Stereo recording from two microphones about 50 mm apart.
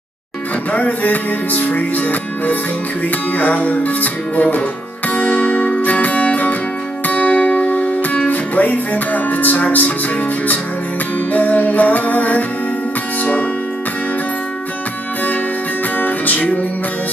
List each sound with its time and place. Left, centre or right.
0.7 s music: left
11.3 s music: left
13.2 s speech: left
16.0 s music: left